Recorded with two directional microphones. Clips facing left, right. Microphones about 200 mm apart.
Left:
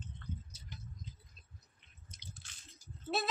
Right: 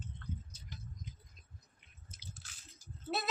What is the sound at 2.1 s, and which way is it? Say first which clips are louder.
Drip: right 1 dB; 5° right (ahead or behind).